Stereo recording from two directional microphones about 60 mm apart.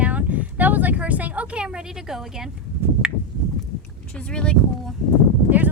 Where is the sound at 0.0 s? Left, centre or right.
Right.